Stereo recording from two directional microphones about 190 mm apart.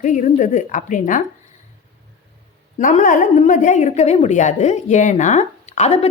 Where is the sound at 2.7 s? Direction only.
40° left (ahead or behind).